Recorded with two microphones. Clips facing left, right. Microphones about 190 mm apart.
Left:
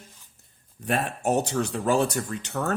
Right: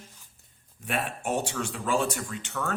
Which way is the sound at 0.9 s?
40° left (ahead or behind).